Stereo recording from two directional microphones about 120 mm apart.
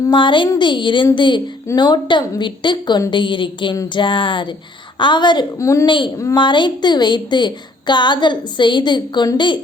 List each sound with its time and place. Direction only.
0.0 s a woman's voice: 40° left (ahead or behind)
5.5 s speech: 25° left (ahead or behind)
5.8 s a woman's voice: 40° left (ahead or behind)